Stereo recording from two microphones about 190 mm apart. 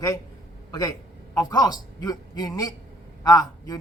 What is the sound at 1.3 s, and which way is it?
Speech, 20° left (ahead or behind).